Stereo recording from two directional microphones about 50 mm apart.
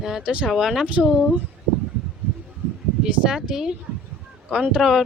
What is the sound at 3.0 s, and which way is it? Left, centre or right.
Speech, centre.